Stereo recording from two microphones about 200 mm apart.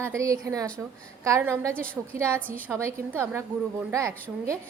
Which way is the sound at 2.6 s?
10° right (ahead or behind).